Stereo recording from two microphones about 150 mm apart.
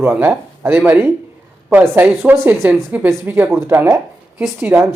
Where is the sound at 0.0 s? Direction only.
15° right (ahead or behind).